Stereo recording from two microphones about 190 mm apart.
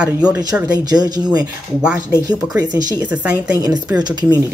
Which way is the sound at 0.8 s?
20° right (ahead or behind).